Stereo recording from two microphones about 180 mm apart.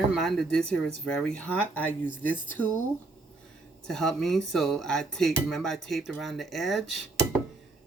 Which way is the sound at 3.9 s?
Centre (ahead or behind).